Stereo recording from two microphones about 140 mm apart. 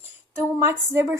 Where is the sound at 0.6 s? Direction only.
20° right (ahead or behind).